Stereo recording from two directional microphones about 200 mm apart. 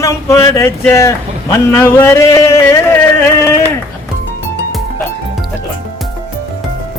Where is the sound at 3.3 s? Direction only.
15° left (ahead or behind).